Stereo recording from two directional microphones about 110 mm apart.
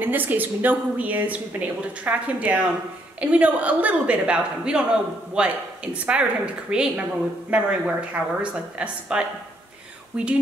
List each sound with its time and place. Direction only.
0.0 s a woman's voice: 15° right (ahead or behind)